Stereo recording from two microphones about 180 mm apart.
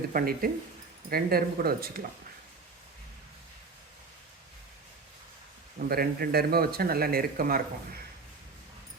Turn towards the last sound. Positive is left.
turn(degrees=-55)  # may be behind; listen again after turning